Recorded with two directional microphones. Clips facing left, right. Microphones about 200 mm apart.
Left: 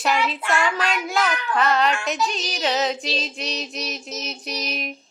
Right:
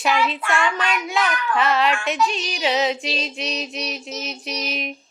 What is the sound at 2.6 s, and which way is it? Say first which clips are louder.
Speech: right 2 dB; centre (ahead or behind).